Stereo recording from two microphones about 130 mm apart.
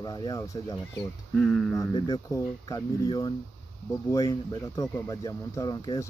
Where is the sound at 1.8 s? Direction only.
35° left (ahead or behind).